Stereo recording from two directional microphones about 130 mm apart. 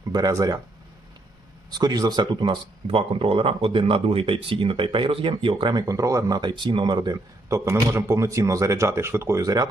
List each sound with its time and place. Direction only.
0.1 s speech: 30° right (ahead or behind)
1.7 s speech: 30° right (ahead or behind)